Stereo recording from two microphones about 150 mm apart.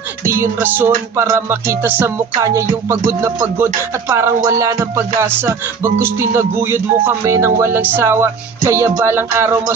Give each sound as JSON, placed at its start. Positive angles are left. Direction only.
{"t": 0.2, "sound": "music", "side_deg": -15}
{"t": 2.3, "sound": "speech", "side_deg": -20}
{"t": 4.9, "sound": "music", "side_deg": -15}